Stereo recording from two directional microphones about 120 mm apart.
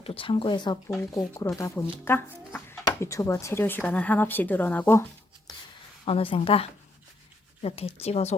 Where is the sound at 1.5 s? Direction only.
25° left (ahead or behind).